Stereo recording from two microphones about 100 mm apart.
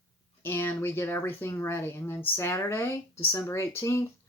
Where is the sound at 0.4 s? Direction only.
25° left (ahead or behind).